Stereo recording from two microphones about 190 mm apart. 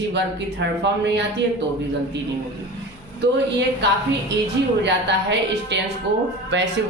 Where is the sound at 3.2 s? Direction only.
65° right (ahead or behind).